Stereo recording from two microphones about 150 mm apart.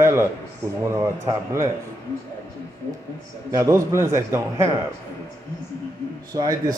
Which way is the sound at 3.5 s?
20° right (ahead or behind).